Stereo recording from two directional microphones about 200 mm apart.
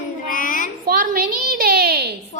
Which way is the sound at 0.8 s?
45° right (ahead or behind).